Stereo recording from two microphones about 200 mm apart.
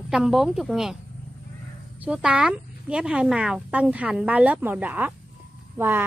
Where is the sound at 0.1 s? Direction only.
Centre (ahead or behind).